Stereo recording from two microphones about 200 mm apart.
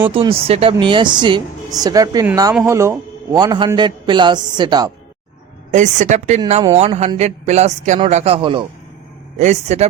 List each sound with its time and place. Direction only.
0.1 s a man's voice: 25° right (ahead or behind)
5.7 s speech: 35° right (ahead or behind)